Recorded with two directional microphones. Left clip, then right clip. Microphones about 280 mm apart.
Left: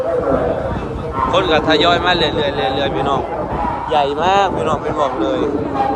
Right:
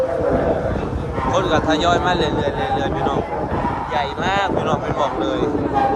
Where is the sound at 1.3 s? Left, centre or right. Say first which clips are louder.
Left 3 dB; centre.